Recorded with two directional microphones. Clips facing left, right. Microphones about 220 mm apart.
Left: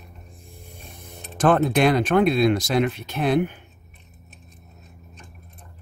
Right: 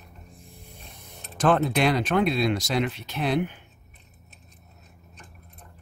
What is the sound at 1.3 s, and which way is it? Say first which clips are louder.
Speech: left 3 dB; 50° left (ahead or behind).